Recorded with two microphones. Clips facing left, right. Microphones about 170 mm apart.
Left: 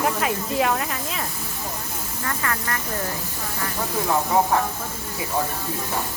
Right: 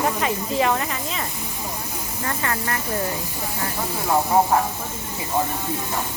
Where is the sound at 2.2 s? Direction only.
25° right (ahead or behind).